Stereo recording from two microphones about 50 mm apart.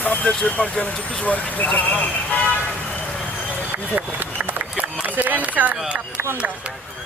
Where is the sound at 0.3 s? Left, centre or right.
Left.